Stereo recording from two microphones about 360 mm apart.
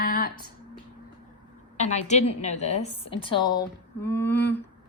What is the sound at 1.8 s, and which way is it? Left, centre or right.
A woman's voice, centre.